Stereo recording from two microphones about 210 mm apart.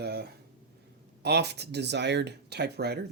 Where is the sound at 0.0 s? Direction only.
50° right (ahead or behind).